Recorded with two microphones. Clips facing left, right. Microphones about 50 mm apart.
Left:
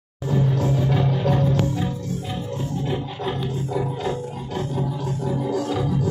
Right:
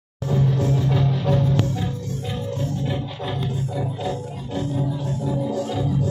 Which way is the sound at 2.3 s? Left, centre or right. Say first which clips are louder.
Right 1 dB; centre.